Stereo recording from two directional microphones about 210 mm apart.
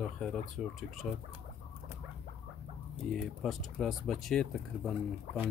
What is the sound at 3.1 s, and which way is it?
Speech, centre (ahead or behind).